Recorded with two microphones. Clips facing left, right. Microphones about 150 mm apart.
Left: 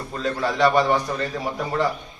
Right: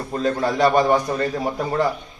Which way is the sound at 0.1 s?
40° right (ahead or behind).